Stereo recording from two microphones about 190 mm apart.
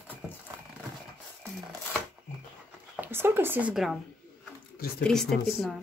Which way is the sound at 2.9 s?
10° right (ahead or behind).